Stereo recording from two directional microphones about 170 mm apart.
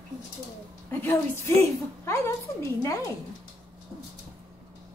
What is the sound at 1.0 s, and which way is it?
A woman's voice, 15° left (ahead or behind).